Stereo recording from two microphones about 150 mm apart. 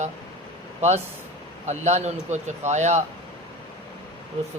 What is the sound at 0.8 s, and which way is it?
A man's voice, 45° right (ahead or behind).